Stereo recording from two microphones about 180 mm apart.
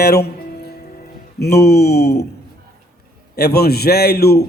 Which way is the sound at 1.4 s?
65° left (ahead or behind).